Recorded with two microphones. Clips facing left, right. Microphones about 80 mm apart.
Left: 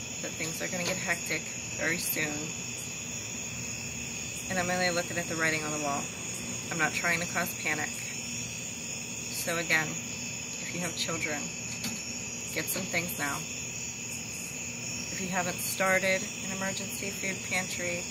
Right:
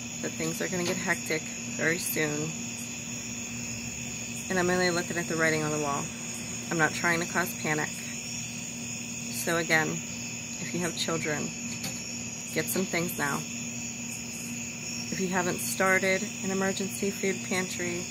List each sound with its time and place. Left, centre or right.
0.2 s speech: right
4.5 s speech: right
5.7 s speech: centre
6.7 s speech: right
9.4 s speech: right
11.1 s speech: right
12.5 s speech: right
15.3 s speech: right